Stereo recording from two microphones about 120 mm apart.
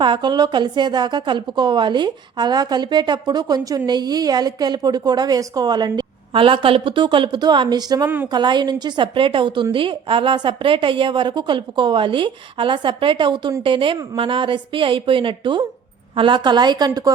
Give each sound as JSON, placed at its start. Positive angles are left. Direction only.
{"t": 0.0, "sound": "a woman's voice", "side_deg": -40}
{"t": 8.0, "sound": "a woman's voice", "side_deg": -15}
{"t": 8.3, "sound": "a woman's voice", "side_deg": -40}